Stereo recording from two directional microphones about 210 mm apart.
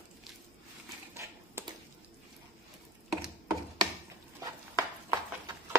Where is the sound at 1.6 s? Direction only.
10° right (ahead or behind).